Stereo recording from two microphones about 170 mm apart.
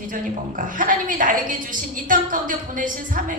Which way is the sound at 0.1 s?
50° right (ahead or behind).